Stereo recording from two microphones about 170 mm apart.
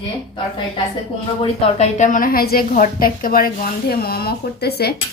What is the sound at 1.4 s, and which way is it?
A woman's voice, 45° left (ahead or behind).